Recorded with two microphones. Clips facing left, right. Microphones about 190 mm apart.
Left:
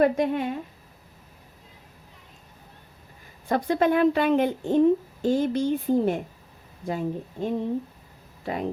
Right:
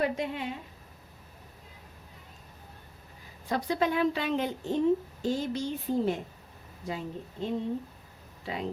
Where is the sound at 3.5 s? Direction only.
55° left (ahead or behind).